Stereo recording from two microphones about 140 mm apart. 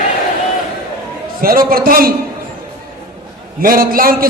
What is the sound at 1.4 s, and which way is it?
Speech, 90° right.